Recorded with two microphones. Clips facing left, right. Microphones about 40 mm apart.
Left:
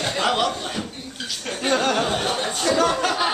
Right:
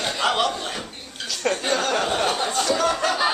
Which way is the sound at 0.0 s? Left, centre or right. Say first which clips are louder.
Even; centre.